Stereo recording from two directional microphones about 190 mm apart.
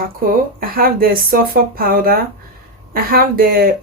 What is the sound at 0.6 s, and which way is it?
Speech, 50° right (ahead or behind).